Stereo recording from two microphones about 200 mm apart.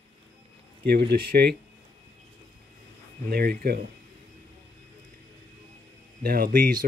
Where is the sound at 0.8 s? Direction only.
55° right (ahead or behind).